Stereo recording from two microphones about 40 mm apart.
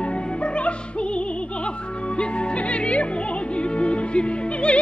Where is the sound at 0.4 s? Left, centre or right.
Left.